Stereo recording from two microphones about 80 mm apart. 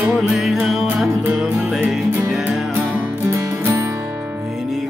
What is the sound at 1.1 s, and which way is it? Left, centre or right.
Music, right.